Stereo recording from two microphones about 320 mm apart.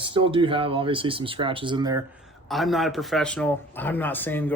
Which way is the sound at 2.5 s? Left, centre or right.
Centre.